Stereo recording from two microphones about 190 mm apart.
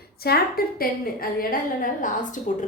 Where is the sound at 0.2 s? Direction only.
55° left (ahead or behind).